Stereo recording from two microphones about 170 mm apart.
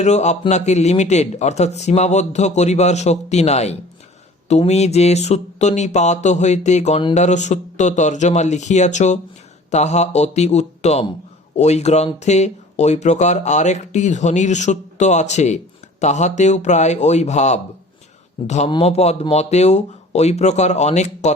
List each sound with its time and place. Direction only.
0.0 s a man's voice: 40° left (ahead or behind)